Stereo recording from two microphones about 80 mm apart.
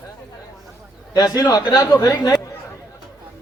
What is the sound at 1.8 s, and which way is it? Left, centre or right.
Speech, left.